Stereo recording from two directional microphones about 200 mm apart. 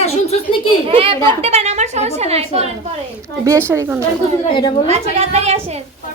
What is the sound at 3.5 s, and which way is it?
Speech, 15° right (ahead or behind).